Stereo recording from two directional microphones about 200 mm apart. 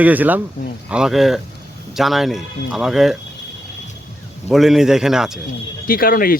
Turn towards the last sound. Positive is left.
turn(degrees=45)  # may be behind; listen again after turning